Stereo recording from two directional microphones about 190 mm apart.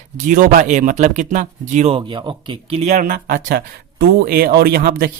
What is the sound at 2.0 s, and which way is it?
Speech, 25° right (ahead or behind).